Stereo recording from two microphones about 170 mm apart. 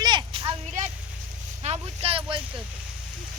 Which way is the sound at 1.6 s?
35° right (ahead or behind).